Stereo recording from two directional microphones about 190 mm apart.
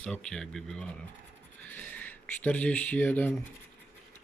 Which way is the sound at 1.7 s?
10° left (ahead or behind).